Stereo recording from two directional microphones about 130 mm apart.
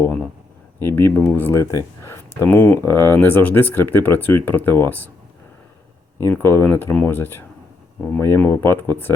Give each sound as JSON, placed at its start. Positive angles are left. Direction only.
{"t": 0.0, "sound": "speech", "side_deg": 15}
{"t": 6.2, "sound": "speech", "side_deg": 15}